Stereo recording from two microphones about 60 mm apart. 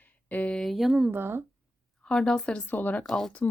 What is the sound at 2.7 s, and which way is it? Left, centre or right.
Speech, left.